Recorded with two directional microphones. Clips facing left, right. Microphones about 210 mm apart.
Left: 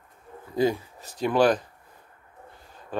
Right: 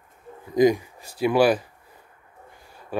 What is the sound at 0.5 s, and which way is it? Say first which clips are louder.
Speech: right 6 dB; 15° right (ahead or behind).